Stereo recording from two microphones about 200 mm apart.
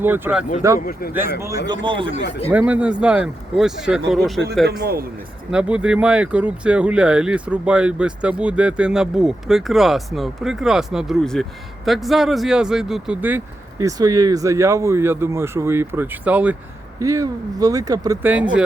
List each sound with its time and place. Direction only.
0.0 s speech: 10° right (ahead or behind)
0.8 s speech: 50° left (ahead or behind)
1.4 s speech: 20° right (ahead or behind)
2.5 s speech: 5° right (ahead or behind)
4.6 s a man's voice: 50° right (ahead or behind)
5.5 s speech: 5° right (ahead or behind)